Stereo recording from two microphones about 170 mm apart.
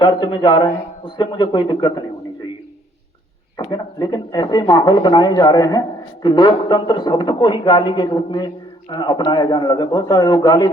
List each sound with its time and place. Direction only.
0.0 s speech: 30° left (ahead or behind)
3.6 s speech: 25° left (ahead or behind)